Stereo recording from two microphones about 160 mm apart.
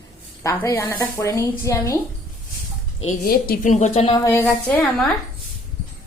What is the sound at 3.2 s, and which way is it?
Speech, 65° left (ahead or behind).